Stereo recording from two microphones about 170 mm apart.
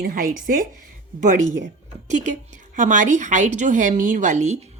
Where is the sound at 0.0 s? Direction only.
55° right (ahead or behind).